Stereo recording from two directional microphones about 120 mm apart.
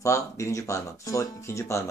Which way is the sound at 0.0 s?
25° left (ahead or behind).